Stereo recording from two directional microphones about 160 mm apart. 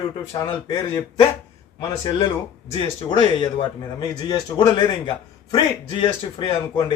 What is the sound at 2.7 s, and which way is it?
A man's voice, 35° left (ahead or behind).